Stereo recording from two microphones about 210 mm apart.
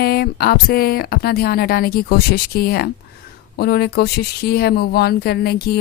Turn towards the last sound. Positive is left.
turn(degrees=50)  # may be behind; listen again after turning